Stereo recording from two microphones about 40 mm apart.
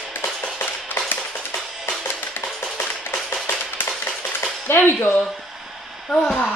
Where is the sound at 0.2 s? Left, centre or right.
Left.